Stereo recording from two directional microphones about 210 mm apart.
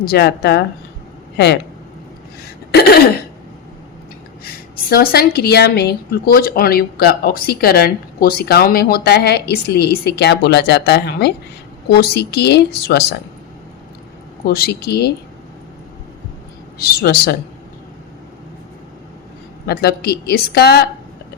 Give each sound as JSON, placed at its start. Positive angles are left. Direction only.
{"t": 0.0, "sound": "a woman's voice", "side_deg": 50}
{"t": 2.7, "sound": "a woman's voice", "side_deg": 50}
{"t": 4.9, "sound": "a woman's voice", "side_deg": 45}
{"t": 14.4, "sound": "a woman's voice", "side_deg": 45}
{"t": 16.7, "sound": "a woman's voice", "side_deg": 45}
{"t": 19.6, "sound": "a woman's voice", "side_deg": 50}